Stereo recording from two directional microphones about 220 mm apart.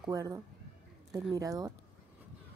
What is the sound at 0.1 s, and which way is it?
Speech, 15° right (ahead or behind).